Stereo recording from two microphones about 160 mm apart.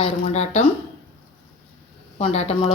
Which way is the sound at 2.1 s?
40° left (ahead or behind).